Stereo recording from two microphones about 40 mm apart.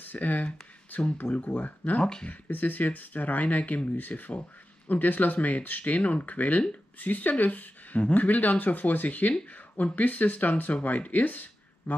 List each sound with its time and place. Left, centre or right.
0.0 s speech: left
0.9 s speech: left